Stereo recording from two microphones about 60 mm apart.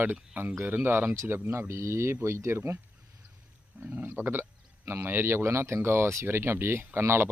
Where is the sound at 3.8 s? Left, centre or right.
Right.